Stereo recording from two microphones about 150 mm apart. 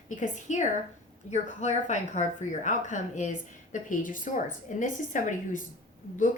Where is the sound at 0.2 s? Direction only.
55° left (ahead or behind).